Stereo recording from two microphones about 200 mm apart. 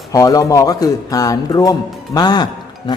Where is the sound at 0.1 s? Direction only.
15° left (ahead or behind).